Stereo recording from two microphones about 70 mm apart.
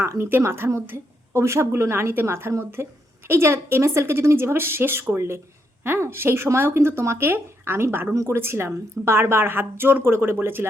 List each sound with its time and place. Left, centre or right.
0.0 s a woman's voice: right